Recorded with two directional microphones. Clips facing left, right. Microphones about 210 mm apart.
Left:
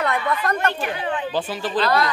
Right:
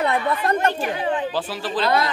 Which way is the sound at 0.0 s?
30° right (ahead or behind).